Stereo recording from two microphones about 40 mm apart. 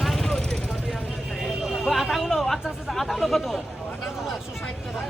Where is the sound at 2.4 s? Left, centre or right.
Centre.